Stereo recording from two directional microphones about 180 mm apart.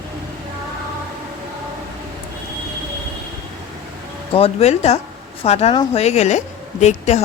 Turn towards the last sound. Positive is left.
turn(degrees=40)  # may be behind; listen again after turning